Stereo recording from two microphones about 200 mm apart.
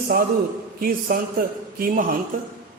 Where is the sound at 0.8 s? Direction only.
45° right (ahead or behind).